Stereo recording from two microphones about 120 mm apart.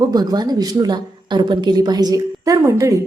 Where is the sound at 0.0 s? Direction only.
30° right (ahead or behind).